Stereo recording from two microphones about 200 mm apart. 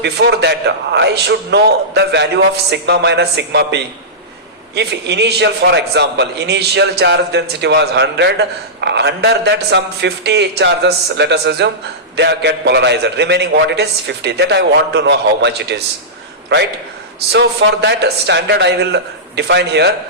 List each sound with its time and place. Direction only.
0.0 s a man's voice: 60° right (ahead or behind)